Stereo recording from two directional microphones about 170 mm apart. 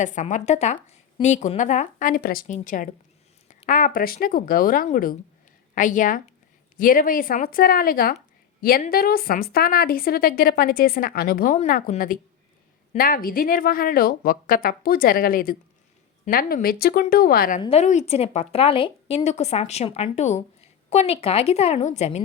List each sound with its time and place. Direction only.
0.0 s a woman's voice: 45° left (ahead or behind)
17.6 s a woman's voice: 35° left (ahead or behind)